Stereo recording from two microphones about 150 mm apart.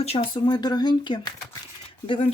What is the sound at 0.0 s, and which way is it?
Speech, 40° left (ahead or behind).